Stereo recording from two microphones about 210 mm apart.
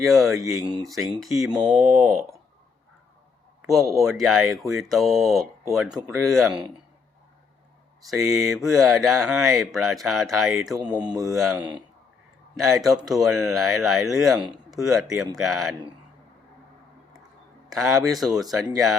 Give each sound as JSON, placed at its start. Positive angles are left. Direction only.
{"t": 0.0, "sound": "speech", "side_deg": 0}
{"t": 3.7, "sound": "speech", "side_deg": 0}
{"t": 8.3, "sound": "speech", "side_deg": 0}
{"t": 10.8, "sound": "mantra", "side_deg": -20}
{"t": 12.5, "sound": "speech", "side_deg": 0}
{"t": 17.7, "sound": "speech", "side_deg": 0}